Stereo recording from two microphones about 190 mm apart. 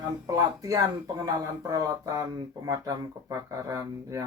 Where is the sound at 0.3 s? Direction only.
20° right (ahead or behind).